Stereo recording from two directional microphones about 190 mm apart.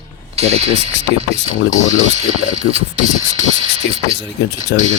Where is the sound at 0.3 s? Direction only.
35° right (ahead or behind).